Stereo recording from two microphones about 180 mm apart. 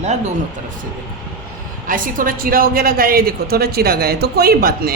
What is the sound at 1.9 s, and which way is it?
A woman's voice, 50° right (ahead or behind).